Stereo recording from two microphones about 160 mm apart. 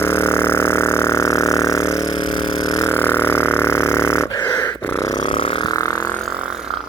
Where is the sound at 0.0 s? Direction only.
15° left (ahead or behind).